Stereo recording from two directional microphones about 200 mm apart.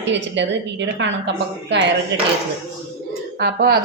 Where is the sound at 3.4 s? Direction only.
50° right (ahead or behind).